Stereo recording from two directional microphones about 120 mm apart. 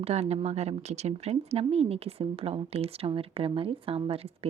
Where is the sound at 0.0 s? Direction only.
60° right (ahead or behind).